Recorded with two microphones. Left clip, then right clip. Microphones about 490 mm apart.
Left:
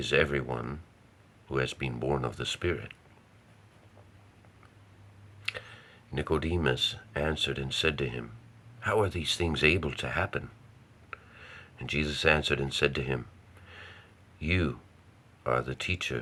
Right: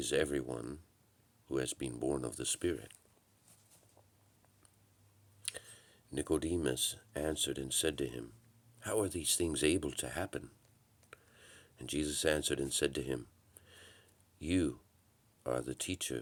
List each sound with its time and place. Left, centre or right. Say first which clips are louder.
0.0 s speech: left 7 dB; right
5.5 s speech: left 10 dB; right
13.7 s a sound: left 10 dB; right
15.4 s speech: left 8 dB; right